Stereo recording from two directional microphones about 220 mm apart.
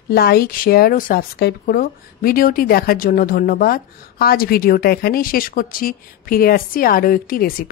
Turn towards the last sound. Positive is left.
turn(degrees=40)  # may be behind; listen again after turning